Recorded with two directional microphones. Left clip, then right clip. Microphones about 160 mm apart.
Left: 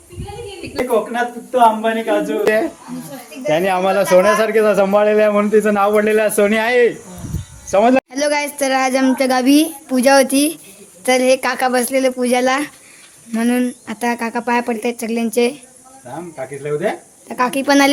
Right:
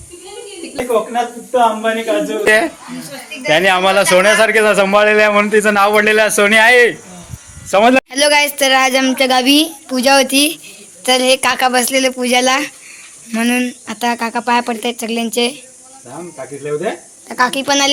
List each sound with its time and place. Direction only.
1.8 s a man's voice: 10° left (ahead or behind)
17.2 s speech: 20° left (ahead or behind)